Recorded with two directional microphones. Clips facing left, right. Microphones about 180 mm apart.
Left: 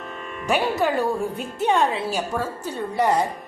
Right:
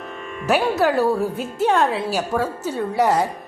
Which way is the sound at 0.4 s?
5° right (ahead or behind).